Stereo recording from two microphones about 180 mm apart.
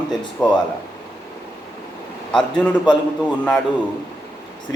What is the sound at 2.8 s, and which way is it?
Speech, 25° left (ahead or behind).